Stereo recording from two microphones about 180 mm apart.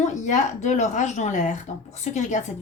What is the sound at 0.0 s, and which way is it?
A woman's voice, 40° left (ahead or behind).